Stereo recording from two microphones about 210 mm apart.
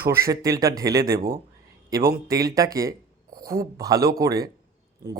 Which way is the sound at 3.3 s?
45° right (ahead or behind).